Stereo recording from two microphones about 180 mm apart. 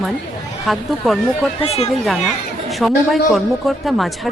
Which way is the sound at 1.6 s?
35° left (ahead or behind).